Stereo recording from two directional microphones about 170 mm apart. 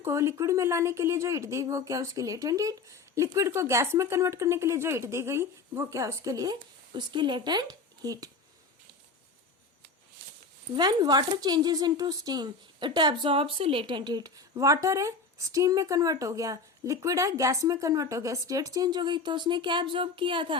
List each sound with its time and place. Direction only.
0.0 s a woman's voice: 15° right (ahead or behind)
10.8 s a woman's voice: 25° right (ahead or behind)